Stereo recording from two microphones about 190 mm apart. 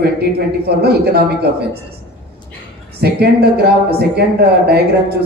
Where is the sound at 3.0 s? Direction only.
55° right (ahead or behind).